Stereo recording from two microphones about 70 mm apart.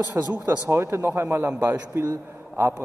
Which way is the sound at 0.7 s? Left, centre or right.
Right.